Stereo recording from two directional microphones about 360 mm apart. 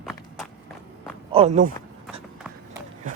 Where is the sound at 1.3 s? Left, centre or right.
Centre.